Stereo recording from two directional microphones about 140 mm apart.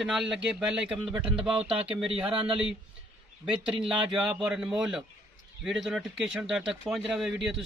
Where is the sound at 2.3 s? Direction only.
40° right (ahead or behind).